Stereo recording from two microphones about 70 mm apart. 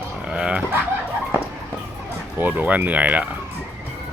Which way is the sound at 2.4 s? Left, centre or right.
Right.